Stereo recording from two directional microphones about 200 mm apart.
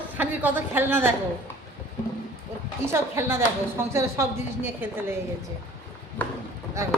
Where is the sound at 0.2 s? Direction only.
10° right (ahead or behind).